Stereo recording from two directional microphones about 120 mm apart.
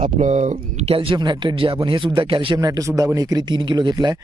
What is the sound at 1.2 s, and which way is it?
Speech, 40° right (ahead or behind).